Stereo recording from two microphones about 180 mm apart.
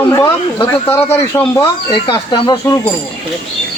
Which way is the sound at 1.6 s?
25° left (ahead or behind).